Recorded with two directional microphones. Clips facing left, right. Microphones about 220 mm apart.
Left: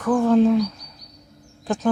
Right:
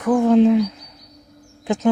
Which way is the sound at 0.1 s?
15° right (ahead or behind).